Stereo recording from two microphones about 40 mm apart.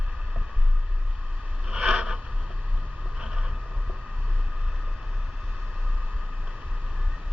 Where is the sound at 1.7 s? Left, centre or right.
Centre.